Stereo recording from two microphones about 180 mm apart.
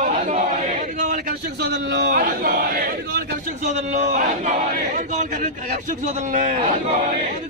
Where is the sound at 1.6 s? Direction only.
65° right (ahead or behind).